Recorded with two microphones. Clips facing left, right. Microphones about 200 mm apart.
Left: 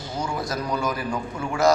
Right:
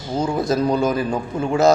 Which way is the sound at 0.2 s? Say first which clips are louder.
Right 9 dB; 25° right (ahead or behind).